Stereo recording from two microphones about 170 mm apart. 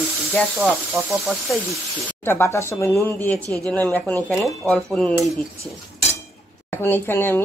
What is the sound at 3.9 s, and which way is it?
Speech, 10° left (ahead or behind).